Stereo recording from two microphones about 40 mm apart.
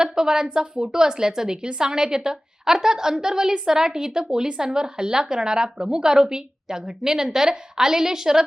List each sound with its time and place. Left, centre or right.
0.0 s a woman's voice: centre